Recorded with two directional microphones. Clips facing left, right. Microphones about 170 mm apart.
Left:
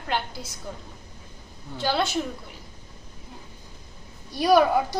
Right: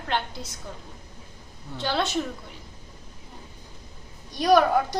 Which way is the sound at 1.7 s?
5° left (ahead or behind).